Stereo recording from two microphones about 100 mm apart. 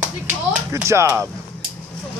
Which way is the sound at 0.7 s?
30° right (ahead or behind).